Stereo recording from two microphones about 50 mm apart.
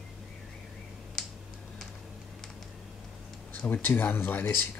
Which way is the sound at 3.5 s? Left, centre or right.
Left.